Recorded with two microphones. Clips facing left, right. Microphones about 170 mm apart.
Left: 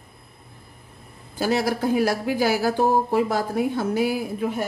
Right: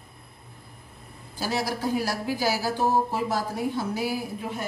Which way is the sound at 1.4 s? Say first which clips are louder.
Left 6 dB; 55° left (ahead or behind).